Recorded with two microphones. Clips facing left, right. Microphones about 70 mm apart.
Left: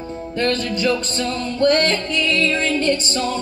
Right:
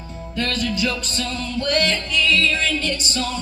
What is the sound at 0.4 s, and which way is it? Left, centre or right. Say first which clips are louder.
Music: left 3 dB; left.